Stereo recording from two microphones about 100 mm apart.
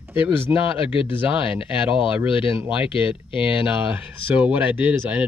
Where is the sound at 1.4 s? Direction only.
60° left (ahead or behind).